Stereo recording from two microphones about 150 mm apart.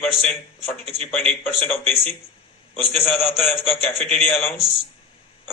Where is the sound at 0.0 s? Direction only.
5° left (ahead or behind).